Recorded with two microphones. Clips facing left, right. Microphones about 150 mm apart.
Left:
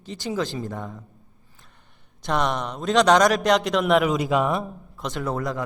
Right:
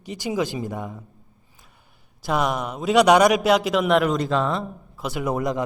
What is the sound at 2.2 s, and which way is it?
A man's voice, 5° right (ahead or behind).